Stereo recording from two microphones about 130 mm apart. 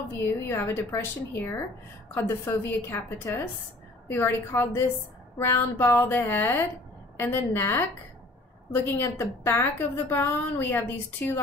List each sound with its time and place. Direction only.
0.5 s a woman's voice: 15° left (ahead or behind)